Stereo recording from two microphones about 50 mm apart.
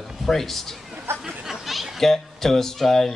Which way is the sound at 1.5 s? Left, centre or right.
Centre.